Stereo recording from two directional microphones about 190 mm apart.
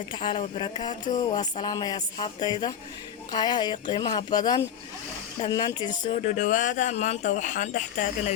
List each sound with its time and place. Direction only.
0.1 s music: 25° left (ahead or behind)
6.1 s speech: 40° left (ahead or behind)